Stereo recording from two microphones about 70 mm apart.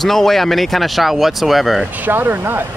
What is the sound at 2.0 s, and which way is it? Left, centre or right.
Speech, right.